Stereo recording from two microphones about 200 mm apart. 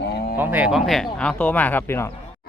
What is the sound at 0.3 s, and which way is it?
Speech, 10° right (ahead or behind).